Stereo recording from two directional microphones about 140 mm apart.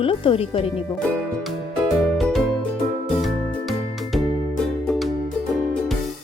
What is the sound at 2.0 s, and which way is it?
Music, centre (ahead or behind).